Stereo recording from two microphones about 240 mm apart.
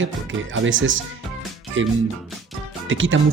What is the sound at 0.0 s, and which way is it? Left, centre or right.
Speech, right.